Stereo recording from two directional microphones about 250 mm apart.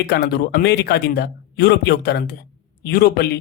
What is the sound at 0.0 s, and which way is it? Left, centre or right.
A man's voice, left.